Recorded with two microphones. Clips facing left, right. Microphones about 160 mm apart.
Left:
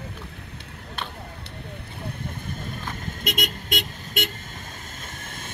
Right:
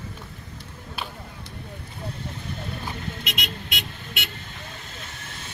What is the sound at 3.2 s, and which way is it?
Vehicle, 45° left (ahead or behind).